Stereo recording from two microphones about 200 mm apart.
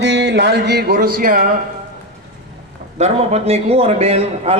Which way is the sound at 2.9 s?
35° right (ahead or behind).